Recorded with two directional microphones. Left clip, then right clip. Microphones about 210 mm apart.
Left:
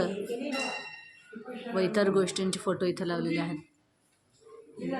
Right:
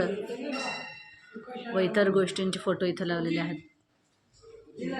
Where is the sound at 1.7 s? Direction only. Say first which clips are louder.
Right 2 dB; centre (ahead or behind).